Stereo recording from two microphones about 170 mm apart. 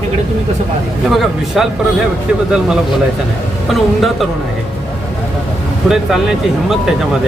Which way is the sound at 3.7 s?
Centre (ahead or behind).